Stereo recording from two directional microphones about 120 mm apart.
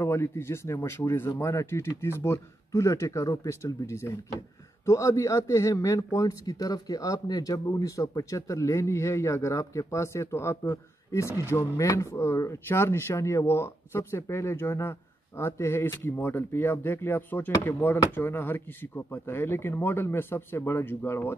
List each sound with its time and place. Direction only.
0.0 s speech: 20° left (ahead or behind)